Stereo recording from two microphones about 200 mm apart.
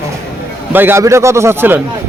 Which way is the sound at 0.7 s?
10° right (ahead or behind).